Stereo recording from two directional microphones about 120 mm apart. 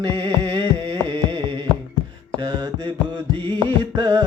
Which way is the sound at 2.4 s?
35° right (ahead or behind).